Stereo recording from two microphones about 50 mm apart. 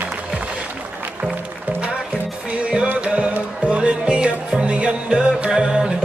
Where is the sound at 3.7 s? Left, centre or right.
Right.